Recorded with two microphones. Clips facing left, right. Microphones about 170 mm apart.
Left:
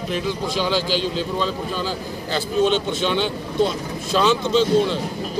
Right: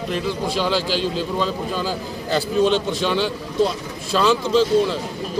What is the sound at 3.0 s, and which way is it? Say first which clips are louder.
Speech: even; 5° right (ahead or behind).